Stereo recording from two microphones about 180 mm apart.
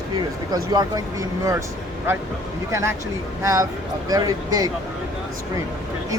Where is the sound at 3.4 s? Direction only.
20° right (ahead or behind).